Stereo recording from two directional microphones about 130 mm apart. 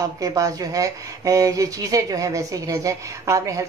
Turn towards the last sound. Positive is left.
turn(degrees=-25)  # may be behind; listen again after turning